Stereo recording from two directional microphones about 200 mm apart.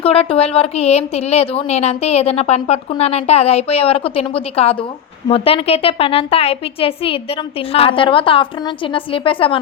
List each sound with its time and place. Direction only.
0.0 s a woman's voice: 30° left (ahead or behind)